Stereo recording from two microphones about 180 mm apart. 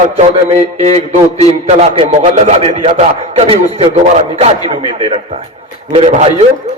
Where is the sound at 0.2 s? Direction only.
35° right (ahead or behind).